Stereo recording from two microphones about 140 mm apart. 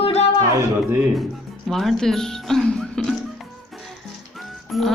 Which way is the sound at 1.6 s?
Centre (ahead or behind).